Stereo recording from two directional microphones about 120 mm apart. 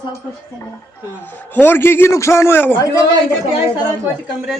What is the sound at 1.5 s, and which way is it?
A man's voice, 15° left (ahead or behind).